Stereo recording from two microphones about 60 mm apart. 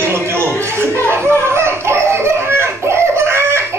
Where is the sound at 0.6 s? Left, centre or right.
Right.